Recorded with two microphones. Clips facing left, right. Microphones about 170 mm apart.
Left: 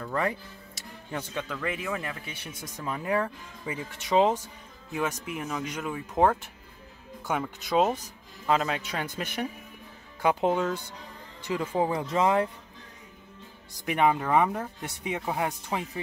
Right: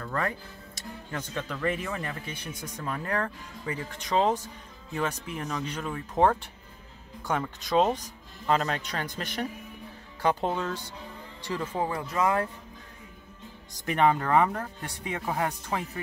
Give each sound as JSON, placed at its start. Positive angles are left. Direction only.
{"t": 0.0, "sound": "speech", "side_deg": 15}
{"t": 1.5, "sound": "speech", "side_deg": 0}
{"t": 13.8, "sound": "speech", "side_deg": 10}